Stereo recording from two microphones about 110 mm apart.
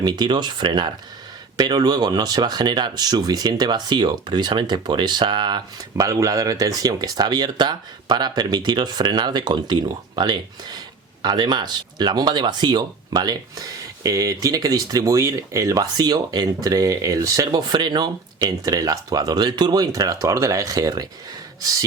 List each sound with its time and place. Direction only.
0.0 s speech: 40° right (ahead or behind)
6.1 s speech: 30° right (ahead or behind)